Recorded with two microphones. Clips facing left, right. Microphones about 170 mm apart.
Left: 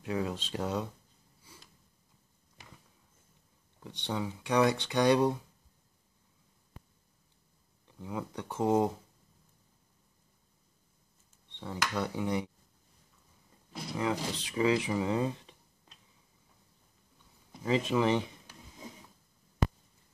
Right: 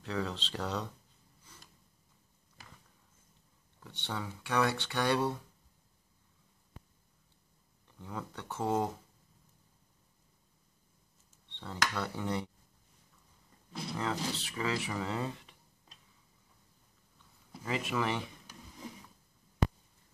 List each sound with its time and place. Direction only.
0.0 s speech: 15° left (ahead or behind)
1.5 s snort: 10° left (ahead or behind)
3.8 s speech: 15° left (ahead or behind)
7.8 s speech: 15° left (ahead or behind)
11.5 s speech: 15° left (ahead or behind)
13.9 s speech: 15° left (ahead or behind)
17.6 s speech: 20° left (ahead or behind)